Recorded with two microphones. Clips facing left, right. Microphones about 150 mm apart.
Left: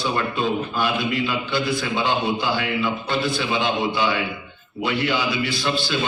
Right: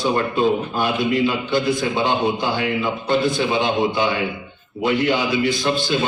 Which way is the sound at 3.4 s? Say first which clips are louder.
Right 4 dB; 45° right (ahead or behind).